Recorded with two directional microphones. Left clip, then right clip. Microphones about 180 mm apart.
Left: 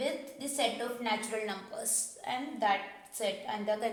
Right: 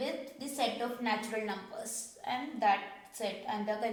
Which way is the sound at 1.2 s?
35° left (ahead or behind).